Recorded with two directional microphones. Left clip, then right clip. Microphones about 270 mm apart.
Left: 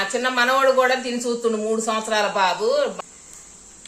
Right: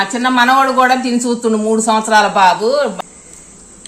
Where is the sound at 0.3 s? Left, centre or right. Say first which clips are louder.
Right 7 dB; centre.